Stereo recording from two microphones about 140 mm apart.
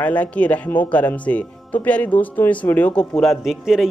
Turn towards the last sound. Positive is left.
turn(degrees=0)  # may be behind; listen again after turning